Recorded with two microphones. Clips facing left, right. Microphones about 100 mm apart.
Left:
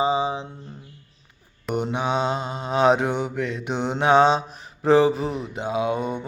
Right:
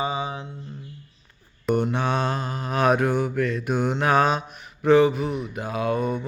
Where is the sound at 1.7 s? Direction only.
15° left (ahead or behind).